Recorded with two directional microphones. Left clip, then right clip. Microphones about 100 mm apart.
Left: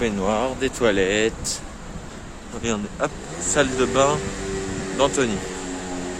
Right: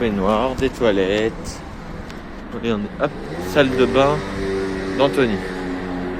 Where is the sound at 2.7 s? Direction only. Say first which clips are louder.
Right 3 dB; 35° left (ahead or behind).